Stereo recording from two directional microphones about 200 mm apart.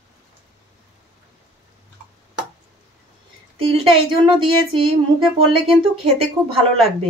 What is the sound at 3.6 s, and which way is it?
Speech, 25° right (ahead or behind).